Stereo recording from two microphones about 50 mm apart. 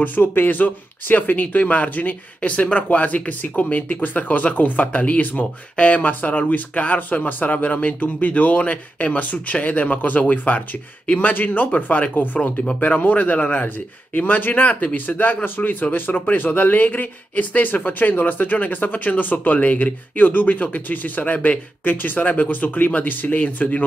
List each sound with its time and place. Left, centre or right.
0.0 s speech: left